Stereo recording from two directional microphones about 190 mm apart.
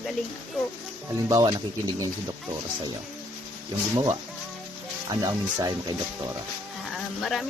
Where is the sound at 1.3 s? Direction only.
20° right (ahead or behind).